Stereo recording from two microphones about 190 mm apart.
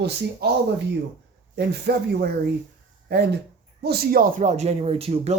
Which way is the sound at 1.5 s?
60° right (ahead or behind).